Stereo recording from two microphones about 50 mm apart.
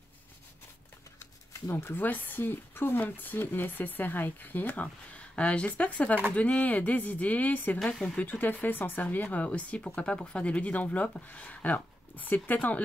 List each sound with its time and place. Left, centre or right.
1.7 s speech: left
2.0 s speech: left
7.9 s speech: centre
8.2 s speech: left